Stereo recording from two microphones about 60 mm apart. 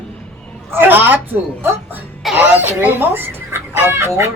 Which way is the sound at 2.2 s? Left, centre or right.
Centre.